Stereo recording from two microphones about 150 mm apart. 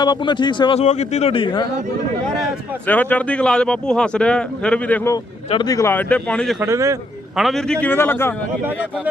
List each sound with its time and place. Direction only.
0.0 s speech: 30° left (ahead or behind)
0.9 s speech: 50° left (ahead or behind)
2.8 s speech: 10° left (ahead or behind)
6.6 s speech: 20° right (ahead or behind)
7.3 s speech: centre (ahead or behind)